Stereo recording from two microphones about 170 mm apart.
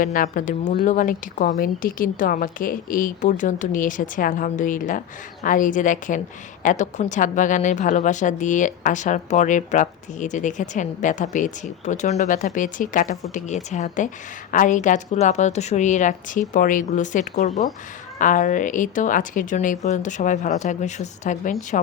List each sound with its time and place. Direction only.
0.0 s a woman's voice: 55° left (ahead or behind)